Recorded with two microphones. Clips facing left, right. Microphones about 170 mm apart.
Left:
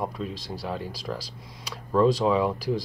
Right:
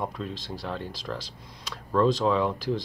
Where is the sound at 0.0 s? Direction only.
5° left (ahead or behind).